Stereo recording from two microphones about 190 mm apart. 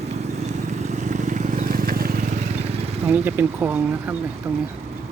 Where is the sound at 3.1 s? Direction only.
10° right (ahead or behind).